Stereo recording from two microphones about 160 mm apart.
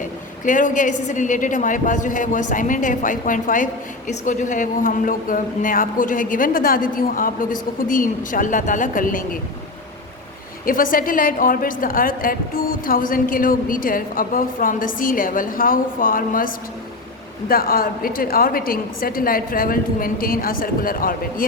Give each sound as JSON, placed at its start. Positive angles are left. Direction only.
{"t": 0.4, "sound": "a woman's voice", "side_deg": 55}
{"t": 10.7, "sound": "a woman's voice", "side_deg": 60}
{"t": 17.5, "sound": "a woman's voice", "side_deg": 65}